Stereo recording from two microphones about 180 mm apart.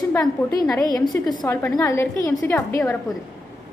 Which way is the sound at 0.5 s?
20° left (ahead or behind).